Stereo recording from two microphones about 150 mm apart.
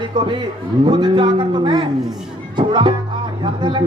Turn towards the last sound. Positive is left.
turn(degrees=-30)  # may be behind; listen again after turning